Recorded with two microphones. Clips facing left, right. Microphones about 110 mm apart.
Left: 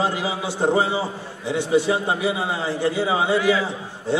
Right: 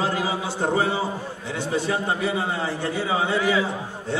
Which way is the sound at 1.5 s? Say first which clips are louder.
Left 6 dB; 15° left (ahead or behind).